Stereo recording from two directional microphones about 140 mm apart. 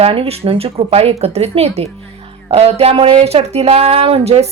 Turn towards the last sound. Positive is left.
turn(degrees=-45)  # may be behind; listen again after turning